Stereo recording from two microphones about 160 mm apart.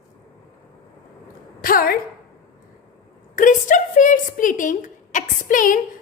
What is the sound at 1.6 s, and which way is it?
Speech, 65° left (ahead or behind).